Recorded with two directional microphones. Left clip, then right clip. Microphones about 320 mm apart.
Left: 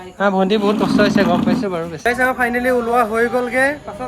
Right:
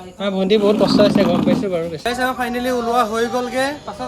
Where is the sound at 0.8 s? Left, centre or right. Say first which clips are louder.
Right 1 dB; centre.